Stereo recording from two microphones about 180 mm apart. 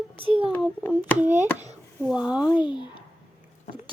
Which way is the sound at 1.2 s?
10° right (ahead or behind).